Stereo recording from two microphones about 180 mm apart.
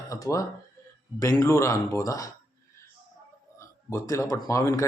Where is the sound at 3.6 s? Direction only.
15° left (ahead or behind).